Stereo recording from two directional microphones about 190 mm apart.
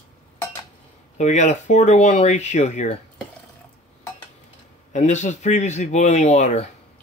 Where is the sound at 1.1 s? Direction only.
40° left (ahead or behind).